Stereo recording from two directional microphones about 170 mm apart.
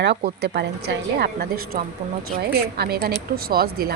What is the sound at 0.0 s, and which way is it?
A woman's voice, 75° right (ahead or behind).